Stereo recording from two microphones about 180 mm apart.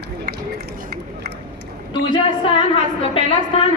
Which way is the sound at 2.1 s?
25° left (ahead or behind).